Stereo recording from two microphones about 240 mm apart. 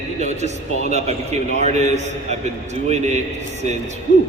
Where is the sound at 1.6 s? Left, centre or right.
Right.